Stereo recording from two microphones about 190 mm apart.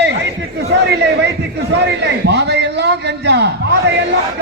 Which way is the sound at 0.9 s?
60° right (ahead or behind).